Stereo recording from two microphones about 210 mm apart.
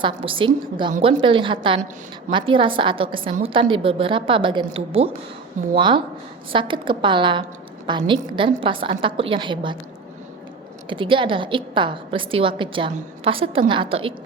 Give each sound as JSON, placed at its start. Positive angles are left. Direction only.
{"t": 0.0, "sound": "a woman's voice", "side_deg": -25}
{"t": 0.9, "sound": "a woman's voice", "side_deg": -35}
{"t": 1.2, "sound": "a woman's voice", "side_deg": -25}
{"t": 10.8, "sound": "a woman's voice", "side_deg": -25}